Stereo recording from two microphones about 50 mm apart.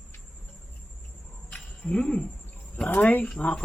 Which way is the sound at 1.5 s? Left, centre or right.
Centre.